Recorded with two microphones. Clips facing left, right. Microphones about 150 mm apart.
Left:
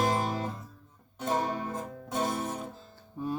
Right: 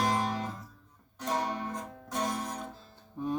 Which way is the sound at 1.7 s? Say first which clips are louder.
Left 3 dB; 5° left (ahead or behind).